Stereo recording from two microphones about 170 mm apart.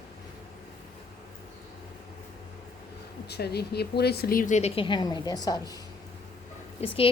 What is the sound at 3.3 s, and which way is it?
A woman's voice, 75° left (ahead or behind).